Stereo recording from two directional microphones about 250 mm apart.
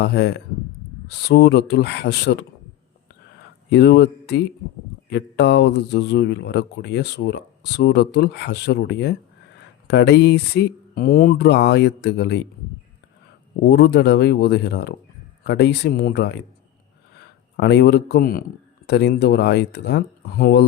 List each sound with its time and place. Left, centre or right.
0.0 s speech: left
3.7 s speech: left
13.7 s speech: left
17.6 s speech: left